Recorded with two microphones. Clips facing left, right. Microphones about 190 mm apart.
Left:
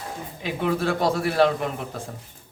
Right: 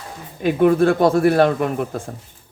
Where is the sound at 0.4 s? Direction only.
50° right (ahead or behind).